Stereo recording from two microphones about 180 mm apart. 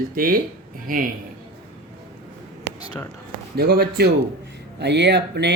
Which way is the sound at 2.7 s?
70° right (ahead or behind).